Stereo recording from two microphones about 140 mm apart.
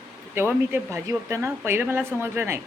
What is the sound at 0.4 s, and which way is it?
Speech, 15° right (ahead or behind).